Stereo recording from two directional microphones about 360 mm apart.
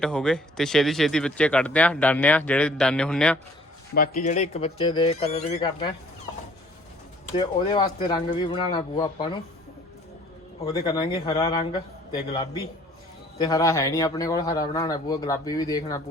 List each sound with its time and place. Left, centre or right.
0.0 s a man's voice: centre
3.9 s speech: left
7.3 s speech: centre
10.7 s speech: centre